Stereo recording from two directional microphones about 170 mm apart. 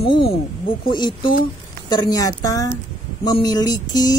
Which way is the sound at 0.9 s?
25° left (ahead or behind).